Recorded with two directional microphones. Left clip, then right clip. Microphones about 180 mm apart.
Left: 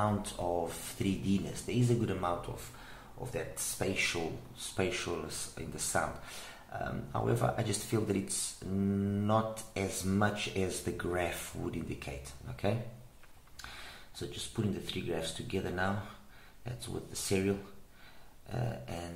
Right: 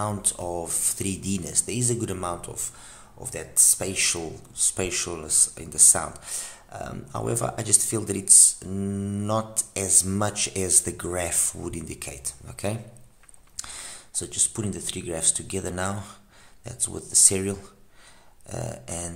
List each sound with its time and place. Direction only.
0.0 s speech: 35° right (ahead or behind)
3.3 s speech: 45° right (ahead or behind)